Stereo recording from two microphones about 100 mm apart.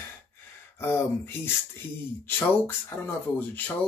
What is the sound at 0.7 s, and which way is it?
Speech, 25° left (ahead or behind).